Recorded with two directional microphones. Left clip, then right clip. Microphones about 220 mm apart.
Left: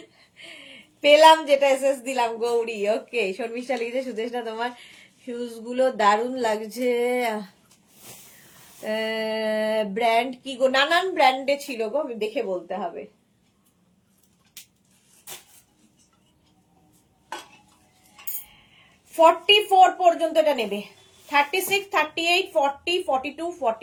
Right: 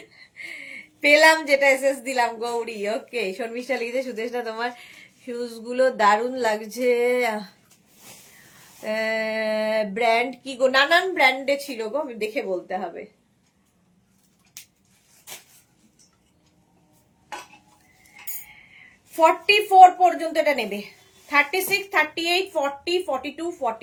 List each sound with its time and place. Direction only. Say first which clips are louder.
0.2 s a sound: right 8 dB; 15° right (ahead or behind)
2.0 s speech: even; 15° right (ahead or behind)
8.8 s speech: right 2 dB; 15° right (ahead or behind)
19.1 s speech: left 1 dB; 15° right (ahead or behind)